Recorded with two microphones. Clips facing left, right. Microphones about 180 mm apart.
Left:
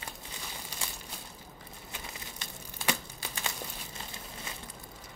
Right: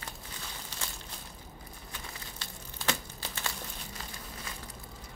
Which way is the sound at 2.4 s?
15° left (ahead or behind).